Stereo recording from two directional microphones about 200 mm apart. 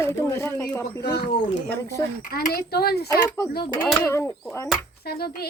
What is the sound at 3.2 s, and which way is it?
Speech, 15° left (ahead or behind).